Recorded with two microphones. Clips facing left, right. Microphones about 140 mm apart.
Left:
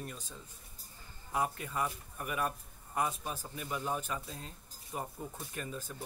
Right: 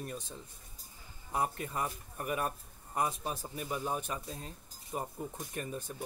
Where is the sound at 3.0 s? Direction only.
25° right (ahead or behind).